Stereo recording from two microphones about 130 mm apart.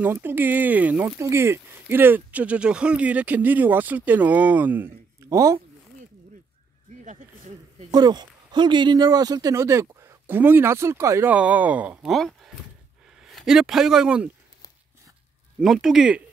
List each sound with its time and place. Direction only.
0.0 s speech: 15° right (ahead or behind)
7.1 s snake: 75° right (ahead or behind)
7.9 s speech: 30° right (ahead or behind)
11.3 s speech: 10° right (ahead or behind)
12.1 s a sound: centre (ahead or behind)
13.1 s speech: centre (ahead or behind)
15.6 s speech: centre (ahead or behind)